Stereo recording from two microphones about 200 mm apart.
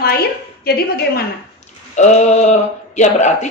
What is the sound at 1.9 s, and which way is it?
Speech, 35° left (ahead or behind).